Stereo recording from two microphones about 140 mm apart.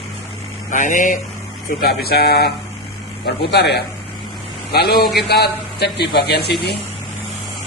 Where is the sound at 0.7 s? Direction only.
65° left (ahead or behind).